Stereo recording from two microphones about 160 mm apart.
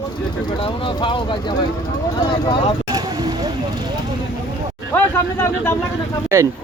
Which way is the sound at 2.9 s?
25° right (ahead or behind).